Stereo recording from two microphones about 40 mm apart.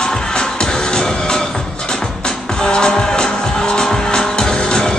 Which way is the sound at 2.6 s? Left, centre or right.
Centre.